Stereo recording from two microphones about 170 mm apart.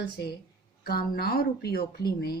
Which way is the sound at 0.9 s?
65° left (ahead or behind).